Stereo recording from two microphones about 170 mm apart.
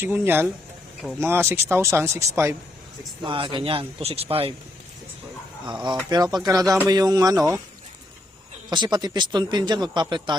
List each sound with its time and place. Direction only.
0.0 s speech: 10° right (ahead or behind)
3.2 s speech: 30° right (ahead or behind)
6.1 s speech: 25° right (ahead or behind)
8.7 s speech: 25° right (ahead or behind)